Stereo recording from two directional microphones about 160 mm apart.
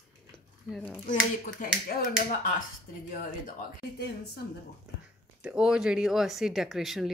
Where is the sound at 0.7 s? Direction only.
Centre (ahead or behind).